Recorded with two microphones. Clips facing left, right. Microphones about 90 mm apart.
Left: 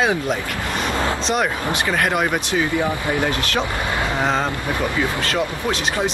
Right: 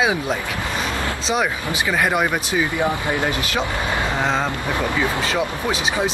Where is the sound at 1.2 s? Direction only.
Centre (ahead or behind).